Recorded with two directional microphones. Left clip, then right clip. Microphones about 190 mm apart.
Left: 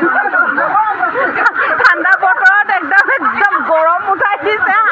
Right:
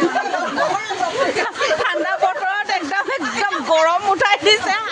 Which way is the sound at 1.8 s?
15° right (ahead or behind).